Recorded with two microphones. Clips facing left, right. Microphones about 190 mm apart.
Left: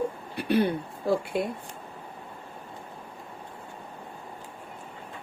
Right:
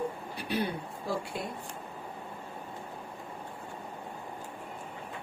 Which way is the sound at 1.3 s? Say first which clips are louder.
Left 9 dB; 65° left (ahead or behind).